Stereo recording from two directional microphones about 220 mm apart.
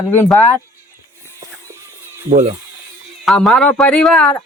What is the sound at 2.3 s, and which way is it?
Speech, 35° right (ahead or behind).